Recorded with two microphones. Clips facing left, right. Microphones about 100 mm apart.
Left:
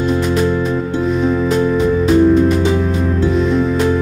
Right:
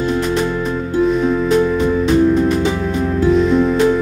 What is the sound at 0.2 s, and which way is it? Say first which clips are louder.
Music: left 2 dB; centre (ahead or behind).